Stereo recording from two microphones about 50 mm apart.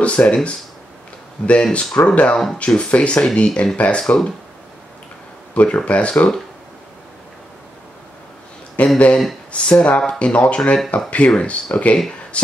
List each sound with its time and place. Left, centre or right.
0.0 s speech: left
2.3 s speech: centre
2.6 s speech: left
5.5 s speech: left
8.7 s speech: left